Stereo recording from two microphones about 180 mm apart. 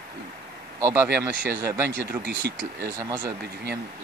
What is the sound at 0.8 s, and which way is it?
Speech, 15° right (ahead or behind).